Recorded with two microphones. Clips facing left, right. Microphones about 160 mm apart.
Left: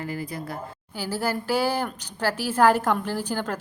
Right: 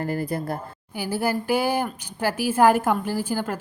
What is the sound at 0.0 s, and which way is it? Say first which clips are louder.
Speech: right 5 dB; 50° right (ahead or behind).